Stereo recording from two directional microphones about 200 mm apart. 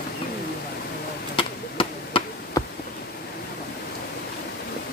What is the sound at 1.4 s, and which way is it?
Chop, 25° left (ahead or behind).